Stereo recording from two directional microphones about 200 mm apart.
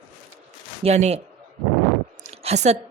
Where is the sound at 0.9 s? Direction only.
35° right (ahead or behind).